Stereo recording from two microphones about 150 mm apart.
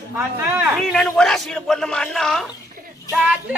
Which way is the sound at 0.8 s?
5° left (ahead or behind).